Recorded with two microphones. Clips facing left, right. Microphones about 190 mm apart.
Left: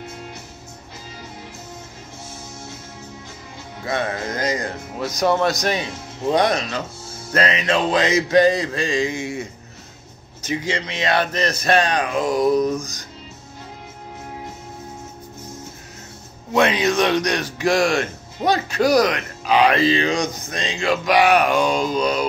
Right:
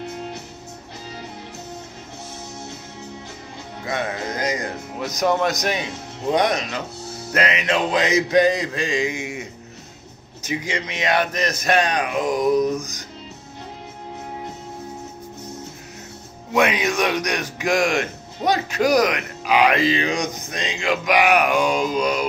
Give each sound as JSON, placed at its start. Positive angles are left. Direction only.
{"t": 3.8, "sound": "speech", "side_deg": -15}
{"t": 10.4, "sound": "speech", "side_deg": -15}
{"t": 12.7, "sound": "music", "side_deg": 35}
{"t": 16.5, "sound": "speech", "side_deg": -15}